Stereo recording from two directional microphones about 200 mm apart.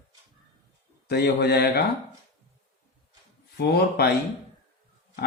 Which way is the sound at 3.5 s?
55° left (ahead or behind).